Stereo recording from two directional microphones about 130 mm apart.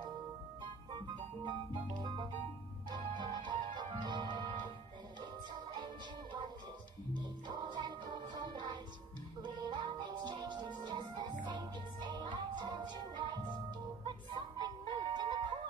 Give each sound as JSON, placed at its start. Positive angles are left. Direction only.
{"t": 0.9, "sound": "music", "side_deg": -35}
{"t": 7.2, "sound": "music", "side_deg": -35}